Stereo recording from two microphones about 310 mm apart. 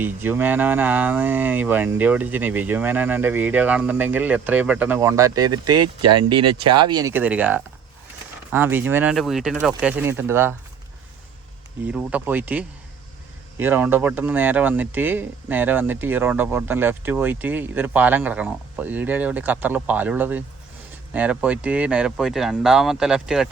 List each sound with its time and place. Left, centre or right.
0.0 s speech: centre
11.9 s speech: centre